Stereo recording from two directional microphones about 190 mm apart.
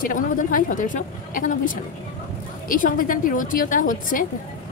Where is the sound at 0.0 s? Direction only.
45° left (ahead or behind).